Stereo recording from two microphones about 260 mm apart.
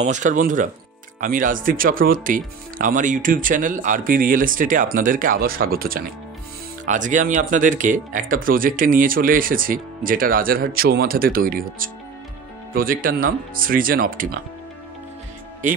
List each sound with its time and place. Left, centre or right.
0.0 s speech: right